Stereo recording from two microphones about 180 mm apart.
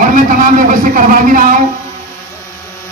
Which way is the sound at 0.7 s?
50° right (ahead or behind).